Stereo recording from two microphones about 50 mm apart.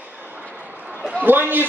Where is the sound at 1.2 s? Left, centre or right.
Right.